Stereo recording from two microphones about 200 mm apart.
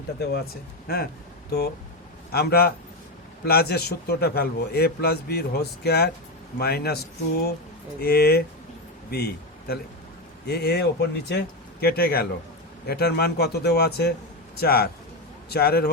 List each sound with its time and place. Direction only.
0.2 s a man's voice: 50° left (ahead or behind)